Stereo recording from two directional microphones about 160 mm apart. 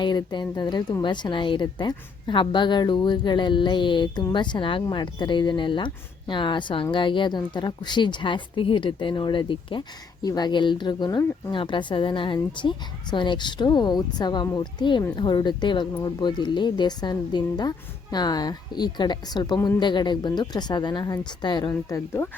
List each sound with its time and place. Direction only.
0.0 s a woman's voice: 25° left (ahead or behind)